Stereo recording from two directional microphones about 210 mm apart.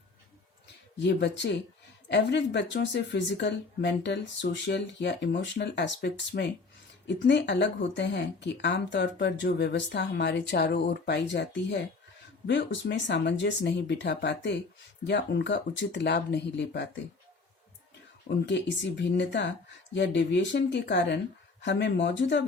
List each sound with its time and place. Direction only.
0.9 s speech: 55° left (ahead or behind)
18.3 s speech: 55° left (ahead or behind)